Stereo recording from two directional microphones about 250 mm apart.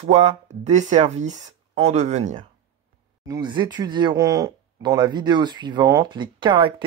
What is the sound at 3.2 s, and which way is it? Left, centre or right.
Speech, centre.